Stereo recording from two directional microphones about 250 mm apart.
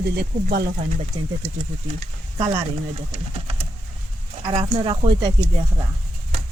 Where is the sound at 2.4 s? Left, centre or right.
Centre.